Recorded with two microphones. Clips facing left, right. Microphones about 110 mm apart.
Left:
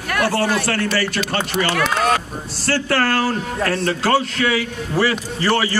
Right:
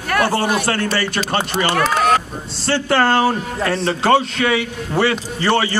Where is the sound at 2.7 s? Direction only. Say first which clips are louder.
Right 3 dB; 25° right (ahead or behind).